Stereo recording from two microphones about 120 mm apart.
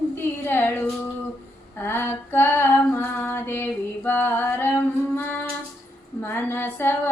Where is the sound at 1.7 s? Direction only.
20° left (ahead or behind).